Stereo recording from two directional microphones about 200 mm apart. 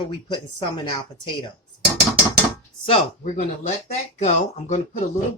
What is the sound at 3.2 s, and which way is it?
Speech, 40° left (ahead or behind).